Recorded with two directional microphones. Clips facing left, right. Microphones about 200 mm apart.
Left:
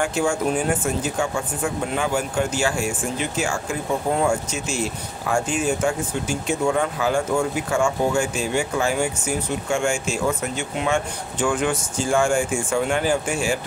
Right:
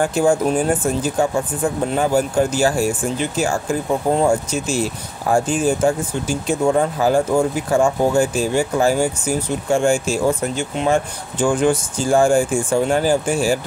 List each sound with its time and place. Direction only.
0.0 s speech: 35° right (ahead or behind)